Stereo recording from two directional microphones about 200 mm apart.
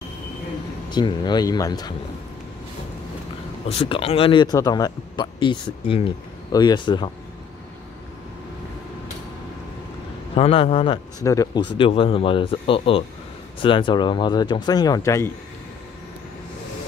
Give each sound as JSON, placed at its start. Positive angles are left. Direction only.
{"t": 0.8, "sound": "a man's voice", "side_deg": 20}
{"t": 3.6, "sound": "a man's voice", "side_deg": 30}
{"t": 10.3, "sound": "a man's voice", "side_deg": 30}